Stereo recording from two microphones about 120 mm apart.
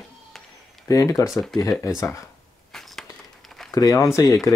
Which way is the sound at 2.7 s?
Centre (ahead or behind).